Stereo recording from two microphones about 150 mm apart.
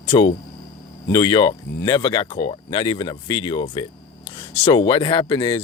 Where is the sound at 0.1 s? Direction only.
35° left (ahead or behind).